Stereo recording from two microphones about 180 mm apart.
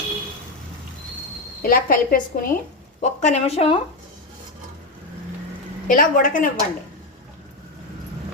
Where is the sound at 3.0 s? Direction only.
40° left (ahead or behind).